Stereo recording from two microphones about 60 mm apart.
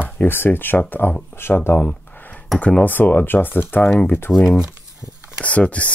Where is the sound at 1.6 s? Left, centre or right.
Left.